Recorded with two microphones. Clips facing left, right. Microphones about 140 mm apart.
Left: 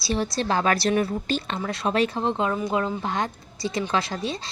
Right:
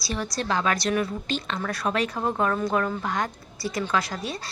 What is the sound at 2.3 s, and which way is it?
A woman's voice, 15° left (ahead or behind).